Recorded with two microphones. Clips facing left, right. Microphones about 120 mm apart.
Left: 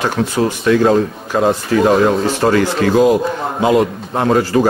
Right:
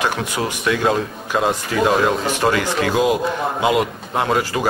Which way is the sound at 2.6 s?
15° right (ahead or behind).